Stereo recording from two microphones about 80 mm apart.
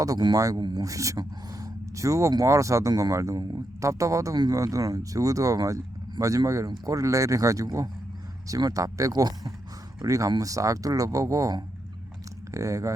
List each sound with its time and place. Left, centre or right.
0.3 s speech: right